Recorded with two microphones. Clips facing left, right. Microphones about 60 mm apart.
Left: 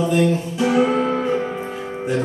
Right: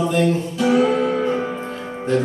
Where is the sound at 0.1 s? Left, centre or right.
Centre.